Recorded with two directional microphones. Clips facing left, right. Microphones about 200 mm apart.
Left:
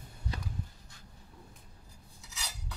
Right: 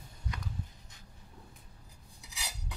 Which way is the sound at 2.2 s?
15° right (ahead or behind).